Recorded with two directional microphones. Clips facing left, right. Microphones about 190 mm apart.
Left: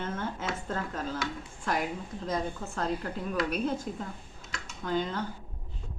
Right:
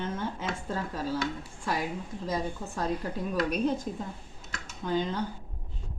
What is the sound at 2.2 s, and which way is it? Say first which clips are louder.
A woman's voice: even; 10° right (ahead or behind).